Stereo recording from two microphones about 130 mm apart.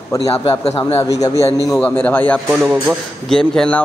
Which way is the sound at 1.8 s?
10° left (ahead or behind).